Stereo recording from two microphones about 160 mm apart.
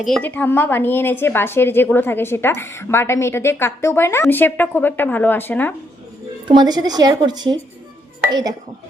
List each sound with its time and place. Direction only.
0.0 s a woman's voice: centre (ahead or behind)
0.3 s a woman's voice: 10° left (ahead or behind)
6.5 s a woman's voice: 25° right (ahead or behind)